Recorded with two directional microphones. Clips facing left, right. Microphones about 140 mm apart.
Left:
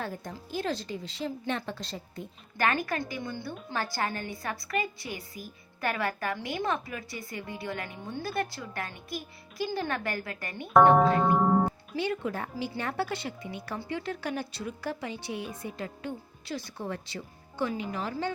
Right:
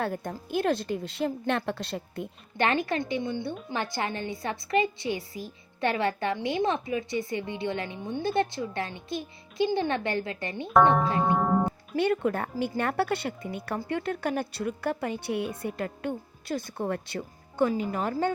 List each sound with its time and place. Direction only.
0.0 s a woman's voice: 55° right (ahead or behind)
2.6 s a woman's voice: 25° right (ahead or behind)
11.9 s a woman's voice: 55° right (ahead or behind)